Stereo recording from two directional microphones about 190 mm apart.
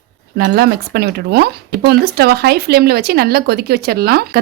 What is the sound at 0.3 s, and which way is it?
Speech, 55° right (ahead or behind).